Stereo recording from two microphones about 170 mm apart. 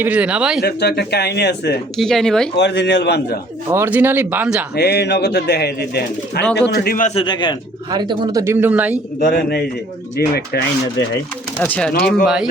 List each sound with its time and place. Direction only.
0.0 s speech: 10° right (ahead or behind)
0.6 s speech: 75° left (ahead or behind)
2.0 s speech: centre (ahead or behind)
2.6 s a man's voice: 90° left
3.7 s speech: 10° right (ahead or behind)
4.7 s speech: 75° left (ahead or behind)
6.4 s speech: 5° left (ahead or behind)
6.7 s speech: 65° left (ahead or behind)
7.0 s a man's voice: 35° left (ahead or behind)
7.9 s speech: 25° right (ahead or behind); by 9.0 s 10° right (ahead or behind)
9.2 s speech: 70° left (ahead or behind)
11.6 s speech: 10° left (ahead or behind)